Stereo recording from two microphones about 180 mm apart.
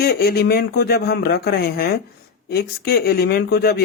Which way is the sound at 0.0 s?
60° left (ahead or behind).